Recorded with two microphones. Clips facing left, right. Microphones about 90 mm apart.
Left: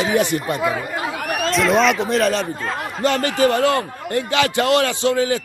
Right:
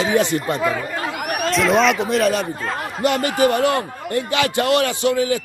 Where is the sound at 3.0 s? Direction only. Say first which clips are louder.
Even; 15° right (ahead or behind).